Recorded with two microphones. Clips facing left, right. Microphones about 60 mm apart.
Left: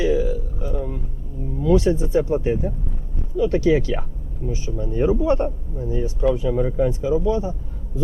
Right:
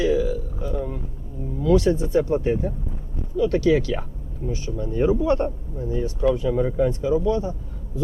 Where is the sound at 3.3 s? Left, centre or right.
Left.